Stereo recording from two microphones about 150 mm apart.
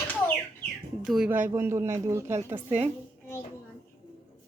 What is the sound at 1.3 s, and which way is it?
A woman's voice, 15° right (ahead or behind).